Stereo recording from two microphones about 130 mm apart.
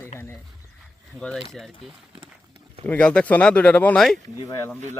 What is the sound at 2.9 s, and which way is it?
Speech, 10° left (ahead or behind).